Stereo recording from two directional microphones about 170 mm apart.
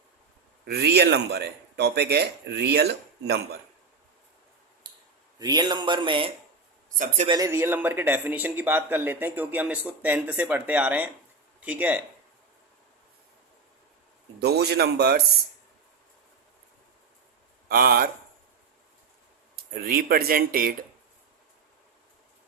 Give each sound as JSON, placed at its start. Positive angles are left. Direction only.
{"t": 0.6, "sound": "a man's voice", "side_deg": -70}
{"t": 4.8, "sound": "clicking", "side_deg": -25}
{"t": 5.4, "sound": "a man's voice", "side_deg": -25}
{"t": 14.3, "sound": "a man's voice", "side_deg": -75}
{"t": 17.7, "sound": "speech", "side_deg": -60}
{"t": 19.7, "sound": "speech", "side_deg": -60}